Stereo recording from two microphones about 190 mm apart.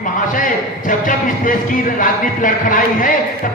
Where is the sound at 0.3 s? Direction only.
45° left (ahead or behind).